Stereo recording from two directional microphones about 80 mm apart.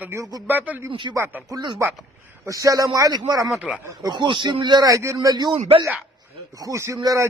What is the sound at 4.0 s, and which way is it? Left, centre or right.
Speech, right.